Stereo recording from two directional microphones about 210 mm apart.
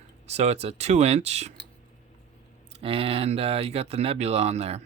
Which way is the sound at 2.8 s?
25° right (ahead or behind).